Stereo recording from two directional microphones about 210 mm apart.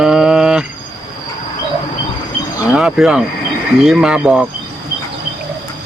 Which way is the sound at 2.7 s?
Centre (ahead or behind).